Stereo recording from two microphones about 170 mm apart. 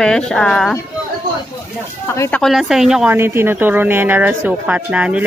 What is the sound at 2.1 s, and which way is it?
Speech, 15° left (ahead or behind).